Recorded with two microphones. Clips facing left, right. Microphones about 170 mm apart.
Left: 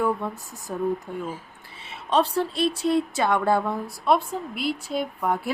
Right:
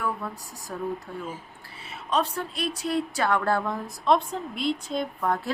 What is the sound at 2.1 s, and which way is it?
A woman's voice, 30° left (ahead or behind).